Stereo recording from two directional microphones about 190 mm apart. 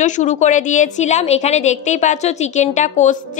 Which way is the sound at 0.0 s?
40° left (ahead or behind).